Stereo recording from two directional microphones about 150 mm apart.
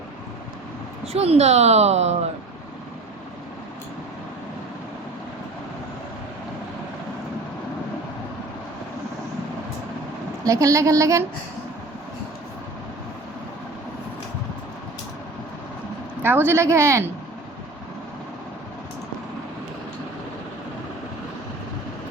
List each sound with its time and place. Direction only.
1.0 s a woman's voice: 45° right (ahead or behind)
10.4 s a woman's voice: 20° right (ahead or behind)
16.2 s speech: 15° right (ahead or behind)